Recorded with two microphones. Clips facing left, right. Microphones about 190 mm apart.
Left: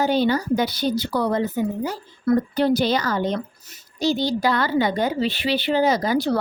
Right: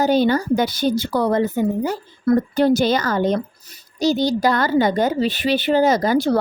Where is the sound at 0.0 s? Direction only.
45° right (ahead or behind).